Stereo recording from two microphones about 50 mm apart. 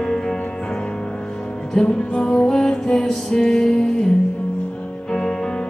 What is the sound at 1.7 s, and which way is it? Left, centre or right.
Music, centre.